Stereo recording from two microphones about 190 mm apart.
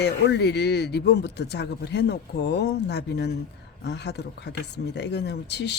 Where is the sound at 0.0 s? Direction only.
65° left (ahead or behind).